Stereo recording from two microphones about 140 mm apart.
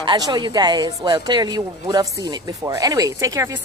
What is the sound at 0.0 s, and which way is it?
Speech, 30° right (ahead or behind).